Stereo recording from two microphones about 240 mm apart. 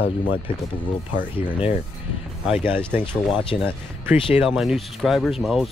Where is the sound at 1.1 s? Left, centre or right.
Left.